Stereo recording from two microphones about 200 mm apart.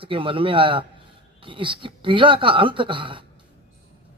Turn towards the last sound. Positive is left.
turn(degrees=-25)  # may be behind; listen again after turning